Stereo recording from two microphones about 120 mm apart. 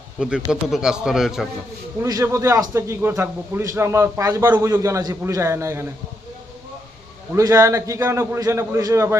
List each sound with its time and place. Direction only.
0.2 s a man's voice: 5° right (ahead or behind)
2.2 s a man's voice: 25° right (ahead or behind)
7.3 s a man's voice: 25° right (ahead or behind)